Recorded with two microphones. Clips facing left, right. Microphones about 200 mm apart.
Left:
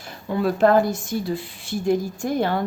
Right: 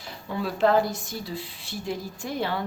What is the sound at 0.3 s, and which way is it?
Speech, 50° left (ahead or behind).